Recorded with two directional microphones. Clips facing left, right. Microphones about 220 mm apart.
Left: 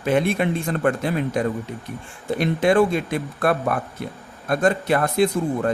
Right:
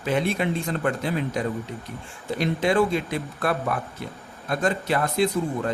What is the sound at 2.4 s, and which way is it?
A man's voice, 55° left (ahead or behind).